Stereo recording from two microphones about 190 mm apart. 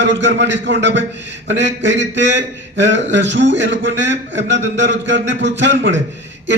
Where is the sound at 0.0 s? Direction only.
70° right (ahead or behind).